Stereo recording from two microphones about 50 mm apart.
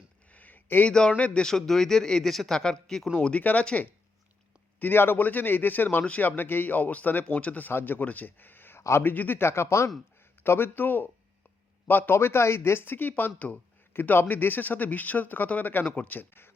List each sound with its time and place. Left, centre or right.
0.3 s a sound: left
0.9 s speech: centre
1.5 s speech: centre
3.2 s speech: left
4.8 s speech: left
7.7 s speech: left
7.9 s speech: left
9.5 s speech: left
10.4 s speech: left
12.1 s speech: left